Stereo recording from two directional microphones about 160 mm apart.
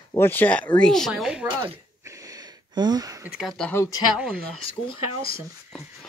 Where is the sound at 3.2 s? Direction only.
5° right (ahead or behind).